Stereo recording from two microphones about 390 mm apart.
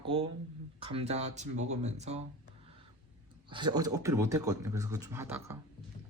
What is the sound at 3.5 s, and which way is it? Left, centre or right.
Speech, centre.